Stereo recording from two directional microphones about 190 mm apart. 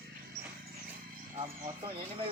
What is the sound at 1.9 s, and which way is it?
Speech, 30° right (ahead or behind).